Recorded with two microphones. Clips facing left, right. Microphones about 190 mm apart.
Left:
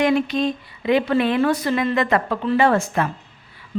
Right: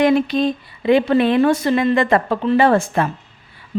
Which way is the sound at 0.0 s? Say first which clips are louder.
Right 3 dB; 35° right (ahead or behind).